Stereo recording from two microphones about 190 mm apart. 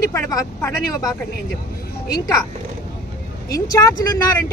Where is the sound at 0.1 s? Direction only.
15° left (ahead or behind).